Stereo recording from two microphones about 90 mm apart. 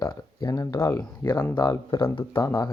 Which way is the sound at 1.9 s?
60° left (ahead or behind).